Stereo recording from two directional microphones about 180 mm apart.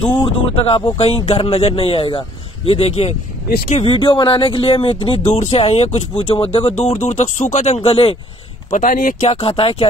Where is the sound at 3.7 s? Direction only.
30° left (ahead or behind).